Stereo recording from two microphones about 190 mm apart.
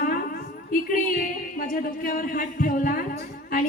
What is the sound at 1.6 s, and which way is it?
A woman's voice, 50° left (ahead or behind).